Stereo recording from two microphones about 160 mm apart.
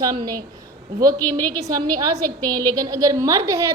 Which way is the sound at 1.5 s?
25° right (ahead or behind).